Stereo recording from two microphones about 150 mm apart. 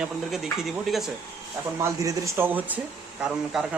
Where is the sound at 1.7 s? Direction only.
20° right (ahead or behind).